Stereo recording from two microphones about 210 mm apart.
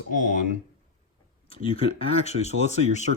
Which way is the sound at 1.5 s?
30° left (ahead or behind).